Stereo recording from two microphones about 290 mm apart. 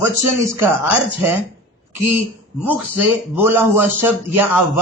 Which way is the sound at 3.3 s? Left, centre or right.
Centre.